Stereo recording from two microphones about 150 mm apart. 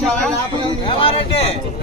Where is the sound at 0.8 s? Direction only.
40° left (ahead or behind).